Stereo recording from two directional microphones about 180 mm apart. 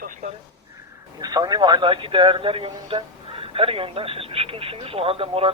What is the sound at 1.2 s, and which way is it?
Speech, 20° right (ahead or behind).